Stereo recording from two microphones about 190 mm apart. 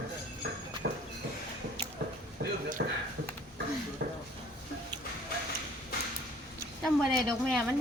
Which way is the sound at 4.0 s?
60° right (ahead or behind).